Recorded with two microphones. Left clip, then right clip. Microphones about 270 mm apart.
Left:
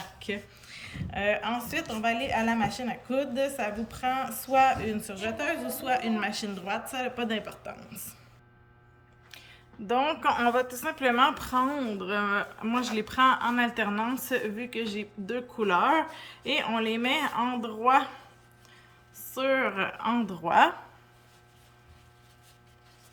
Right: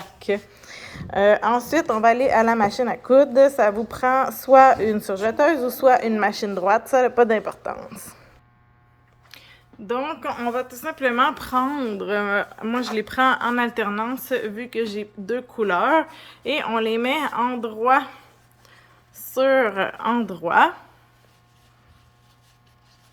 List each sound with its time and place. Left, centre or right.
0.2 s a woman's voice: centre
9.3 s speech: centre